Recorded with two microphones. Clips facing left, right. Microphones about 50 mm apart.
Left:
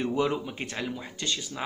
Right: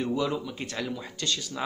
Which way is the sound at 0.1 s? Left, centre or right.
Left.